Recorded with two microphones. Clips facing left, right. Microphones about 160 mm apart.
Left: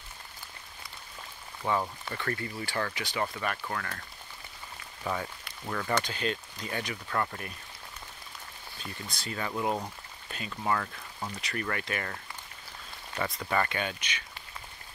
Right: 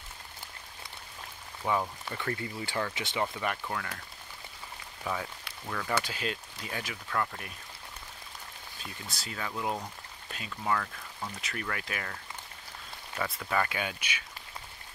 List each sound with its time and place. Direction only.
1.6 s speech: 5° right (ahead or behind); by 3.3 s 25° right (ahead or behind)
3.6 s speech: 10° right (ahead or behind)
5.0 s speech: centre (ahead or behind)
8.8 s speech: 5° right (ahead or behind)